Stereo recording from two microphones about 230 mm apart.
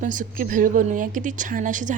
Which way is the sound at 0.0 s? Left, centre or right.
Right.